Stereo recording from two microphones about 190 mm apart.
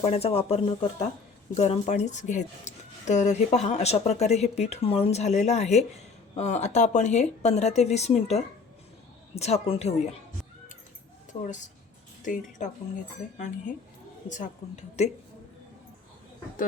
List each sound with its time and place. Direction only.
0.0 s speech: 30° left (ahead or behind)
12.2 s speech: 40° left (ahead or behind)
14.3 s speech: 40° left (ahead or behind)